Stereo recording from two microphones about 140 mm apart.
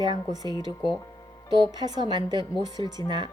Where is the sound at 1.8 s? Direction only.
30° right (ahead or behind).